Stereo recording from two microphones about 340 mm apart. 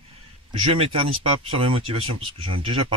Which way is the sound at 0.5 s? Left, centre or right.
Centre.